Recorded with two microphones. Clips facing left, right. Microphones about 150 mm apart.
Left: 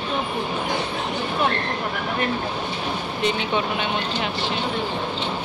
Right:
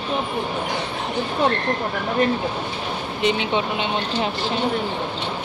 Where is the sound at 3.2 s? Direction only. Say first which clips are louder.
Right 2 dB; 25° right (ahead or behind).